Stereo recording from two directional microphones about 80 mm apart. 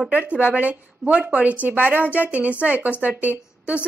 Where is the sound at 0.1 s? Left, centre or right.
Centre.